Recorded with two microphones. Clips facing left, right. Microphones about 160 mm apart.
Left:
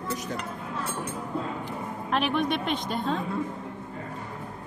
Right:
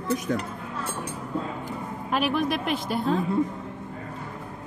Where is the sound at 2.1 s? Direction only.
Centre (ahead or behind).